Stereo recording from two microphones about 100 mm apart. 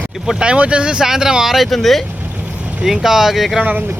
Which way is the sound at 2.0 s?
20° right (ahead or behind).